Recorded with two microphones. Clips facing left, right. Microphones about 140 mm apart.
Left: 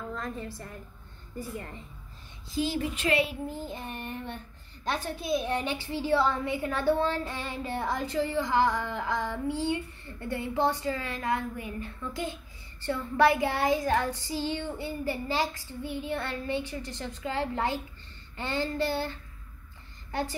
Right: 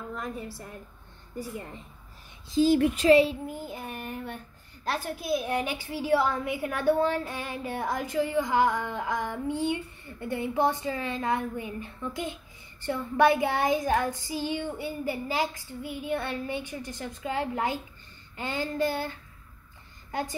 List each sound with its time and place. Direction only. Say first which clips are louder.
0.1 s a woman's voice: even; 10° right (ahead or behind)
3.0 s child singing: right 7 dB; 35° right (ahead or behind)
3.4 s a woman's voice: even; 10° right (ahead or behind)